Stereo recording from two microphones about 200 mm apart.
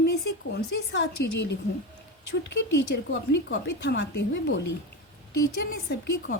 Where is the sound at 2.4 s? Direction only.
60° left (ahead or behind).